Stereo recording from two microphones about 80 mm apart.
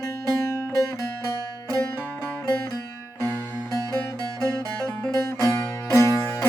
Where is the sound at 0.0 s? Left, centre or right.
Left.